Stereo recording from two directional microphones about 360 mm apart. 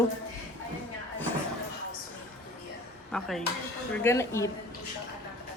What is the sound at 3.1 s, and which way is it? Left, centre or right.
A man's voice, centre.